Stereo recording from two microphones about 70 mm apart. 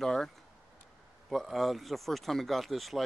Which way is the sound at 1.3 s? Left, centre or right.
Centre.